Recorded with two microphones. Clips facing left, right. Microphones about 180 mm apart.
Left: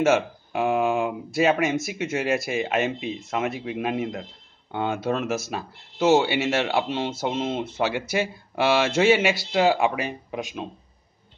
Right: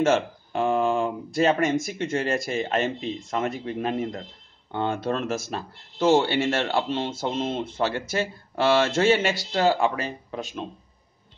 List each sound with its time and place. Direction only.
0.0 s speech: 10° left (ahead or behind)